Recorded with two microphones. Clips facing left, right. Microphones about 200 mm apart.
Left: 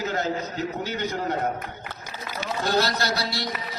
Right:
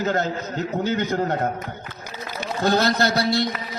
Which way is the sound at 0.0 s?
50° right (ahead or behind).